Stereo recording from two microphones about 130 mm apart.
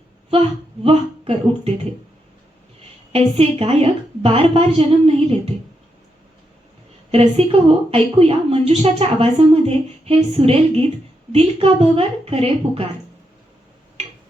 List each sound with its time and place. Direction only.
0.9 s speech: 50° right (ahead or behind)
3.1 s a woman's voice: 50° right (ahead or behind)
7.1 s a woman's voice: 50° right (ahead or behind)